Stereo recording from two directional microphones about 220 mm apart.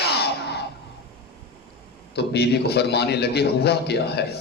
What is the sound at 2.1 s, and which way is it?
A man's voice, 45° left (ahead or behind).